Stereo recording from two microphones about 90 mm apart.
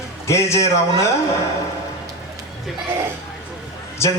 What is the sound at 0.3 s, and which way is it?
Speech, 35° left (ahead or behind).